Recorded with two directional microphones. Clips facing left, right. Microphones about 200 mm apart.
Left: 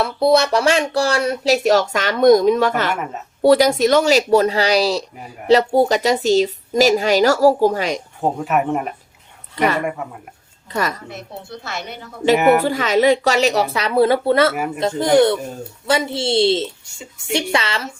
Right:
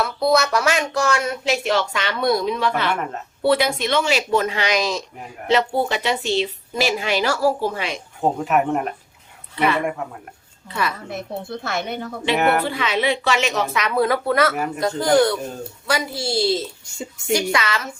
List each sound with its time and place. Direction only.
0.0 s speech: 30° left (ahead or behind)
2.9 s speech: 5° left (ahead or behind)
3.4 s speech: 40° left (ahead or behind)
8.2 s speech: centre (ahead or behind)
9.6 s speech: 40° left (ahead or behind)
9.8 s speech: 5° left (ahead or behind)
10.7 s speech: 45° left (ahead or behind)
11.6 s a woman's voice: 55° right (ahead or behind)
12.6 s a woman's voice: 45° left (ahead or behind)